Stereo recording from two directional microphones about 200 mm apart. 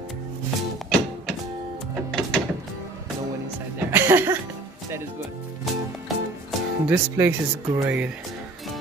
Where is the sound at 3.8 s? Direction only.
10° right (ahead or behind).